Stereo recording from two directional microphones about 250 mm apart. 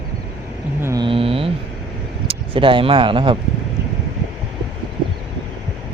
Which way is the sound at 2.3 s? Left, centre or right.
Right.